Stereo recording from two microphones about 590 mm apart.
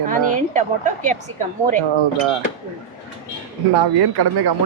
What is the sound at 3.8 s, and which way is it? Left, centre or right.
Speech, right.